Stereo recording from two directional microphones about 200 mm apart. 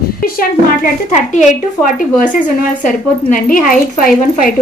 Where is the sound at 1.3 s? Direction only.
40° left (ahead or behind).